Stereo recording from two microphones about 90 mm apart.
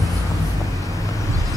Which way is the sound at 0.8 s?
40° left (ahead or behind).